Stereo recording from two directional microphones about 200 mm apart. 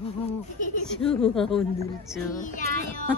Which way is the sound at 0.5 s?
40° left (ahead or behind).